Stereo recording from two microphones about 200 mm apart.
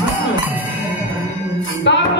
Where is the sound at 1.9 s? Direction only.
65° left (ahead or behind).